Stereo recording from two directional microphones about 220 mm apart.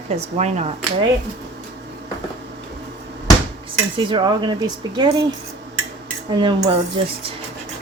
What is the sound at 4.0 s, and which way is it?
Speech, 20° right (ahead or behind).